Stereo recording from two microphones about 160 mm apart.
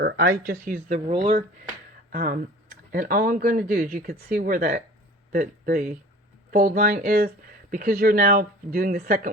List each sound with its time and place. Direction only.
0.0 s speech: 80° right
0.9 s speech: 40° right (ahead or behind)
2.1 s speech: 65° right (ahead or behind)
4.4 s speech: 60° right (ahead or behind)